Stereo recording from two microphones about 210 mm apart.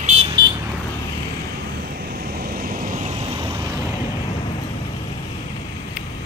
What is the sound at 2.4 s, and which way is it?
Vehicle, 45° right (ahead or behind).